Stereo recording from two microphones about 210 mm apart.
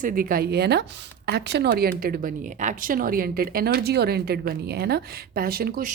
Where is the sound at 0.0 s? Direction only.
40° right (ahead or behind).